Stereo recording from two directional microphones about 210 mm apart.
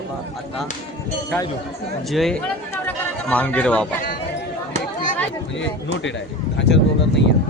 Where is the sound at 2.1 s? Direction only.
Centre (ahead or behind).